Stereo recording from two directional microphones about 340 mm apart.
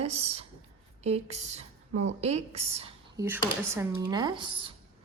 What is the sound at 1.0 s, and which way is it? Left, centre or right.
Speech, centre.